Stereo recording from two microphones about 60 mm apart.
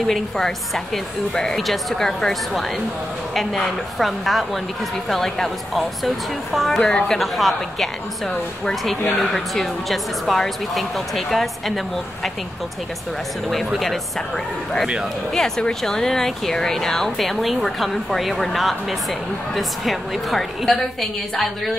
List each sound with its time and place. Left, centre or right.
0.0 s a woman's voice: centre
6.8 s a woman's voice: centre
7.2 s speech: centre
9.3 s speech: centre
15.3 s speech: centre